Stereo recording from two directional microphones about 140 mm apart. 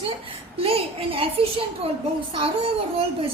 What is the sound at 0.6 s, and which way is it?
Speech, 40° right (ahead or behind).